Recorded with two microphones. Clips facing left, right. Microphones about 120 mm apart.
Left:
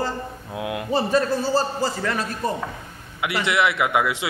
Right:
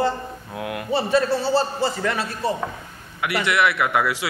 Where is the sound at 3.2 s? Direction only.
25° left (ahead or behind).